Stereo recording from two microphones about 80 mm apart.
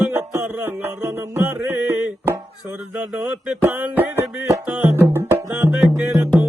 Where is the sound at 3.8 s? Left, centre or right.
Right.